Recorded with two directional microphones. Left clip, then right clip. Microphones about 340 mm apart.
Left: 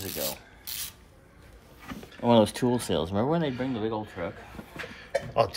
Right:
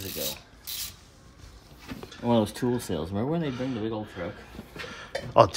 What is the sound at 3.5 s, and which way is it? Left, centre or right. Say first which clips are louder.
Speech: left 1 dB; centre.